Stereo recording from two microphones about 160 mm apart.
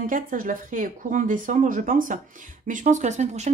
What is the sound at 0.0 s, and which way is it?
Speech, 60° right (ahead or behind).